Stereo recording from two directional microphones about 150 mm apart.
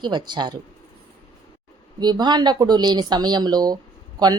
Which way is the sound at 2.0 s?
30° right (ahead or behind).